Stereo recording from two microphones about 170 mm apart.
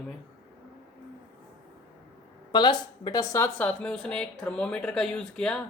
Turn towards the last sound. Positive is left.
turn(degrees=5)  # may be behind; listen again after turning